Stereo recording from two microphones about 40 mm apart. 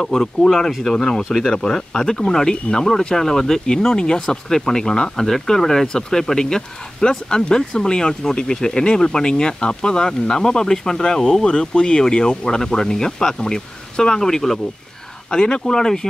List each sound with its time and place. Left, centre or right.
0.0 s speech: centre
15.3 s speech: centre